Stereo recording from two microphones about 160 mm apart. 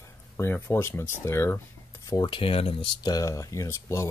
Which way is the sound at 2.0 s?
25° left (ahead or behind).